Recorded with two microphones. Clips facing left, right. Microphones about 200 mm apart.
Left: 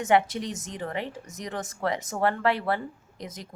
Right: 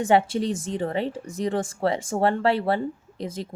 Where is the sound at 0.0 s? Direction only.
30° right (ahead or behind).